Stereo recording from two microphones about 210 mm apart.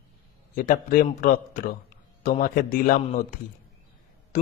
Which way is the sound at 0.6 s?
40° left (ahead or behind).